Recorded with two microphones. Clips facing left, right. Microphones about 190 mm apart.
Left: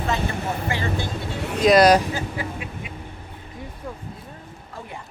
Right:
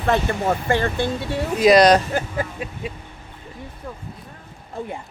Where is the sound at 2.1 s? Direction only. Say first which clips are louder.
Right 4 dB; 45° right (ahead or behind).